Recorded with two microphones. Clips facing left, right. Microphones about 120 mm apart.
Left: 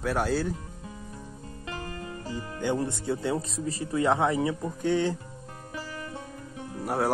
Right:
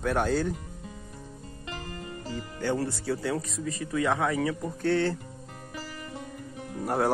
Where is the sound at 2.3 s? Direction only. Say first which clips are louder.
Left 1 dB; 15° left (ahead or behind).